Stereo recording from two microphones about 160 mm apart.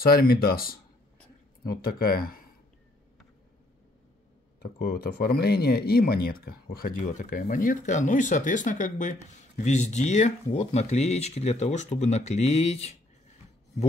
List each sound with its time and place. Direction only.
0.0 s speech: 65° left (ahead or behind)
4.6 s speech: 70° left (ahead or behind); by 12.9 s 40° left (ahead or behind)